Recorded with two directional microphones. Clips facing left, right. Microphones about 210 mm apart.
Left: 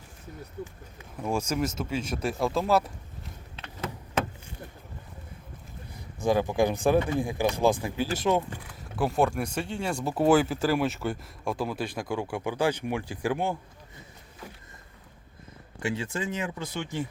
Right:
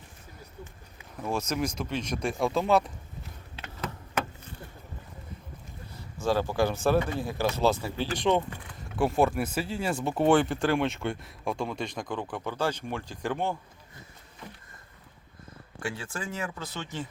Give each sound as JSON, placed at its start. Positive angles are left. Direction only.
{"t": 1.1, "sound": "speech", "side_deg": 10}
{"t": 6.2, "sound": "speech", "side_deg": 15}
{"t": 15.8, "sound": "speech", "side_deg": 20}